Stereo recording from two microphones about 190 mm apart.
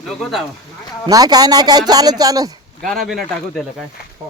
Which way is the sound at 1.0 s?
20° right (ahead or behind).